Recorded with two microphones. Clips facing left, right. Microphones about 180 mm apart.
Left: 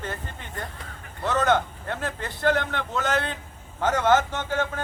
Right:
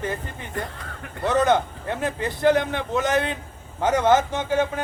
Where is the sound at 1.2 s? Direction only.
15° right (ahead or behind).